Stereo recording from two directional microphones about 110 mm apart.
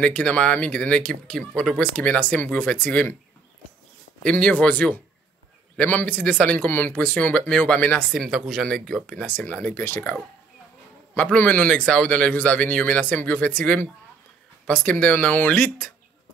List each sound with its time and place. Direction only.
0.0 s speech: 10° left (ahead or behind)
4.2 s speech: 10° left (ahead or behind)
8.1 s speech: centre (ahead or behind); by 15.9 s 15° left (ahead or behind)